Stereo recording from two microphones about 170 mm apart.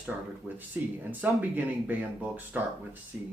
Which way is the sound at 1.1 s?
10° right (ahead or behind).